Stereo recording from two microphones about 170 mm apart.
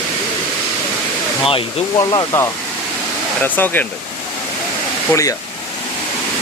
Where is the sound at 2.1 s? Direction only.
20° left (ahead or behind).